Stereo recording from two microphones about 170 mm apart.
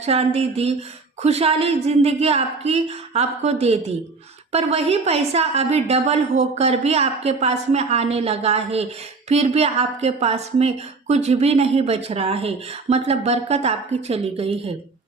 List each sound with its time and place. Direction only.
0.0 s a woman's voice: 35° right (ahead or behind)